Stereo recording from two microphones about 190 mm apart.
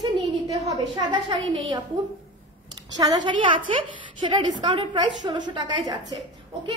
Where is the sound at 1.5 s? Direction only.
30° right (ahead or behind).